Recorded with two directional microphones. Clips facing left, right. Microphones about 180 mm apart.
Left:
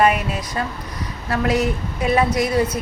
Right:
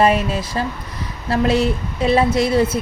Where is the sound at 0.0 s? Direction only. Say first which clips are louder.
Right 2 dB; 30° right (ahead or behind).